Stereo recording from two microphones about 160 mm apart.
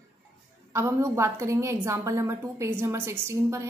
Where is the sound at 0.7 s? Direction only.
15° right (ahead or behind).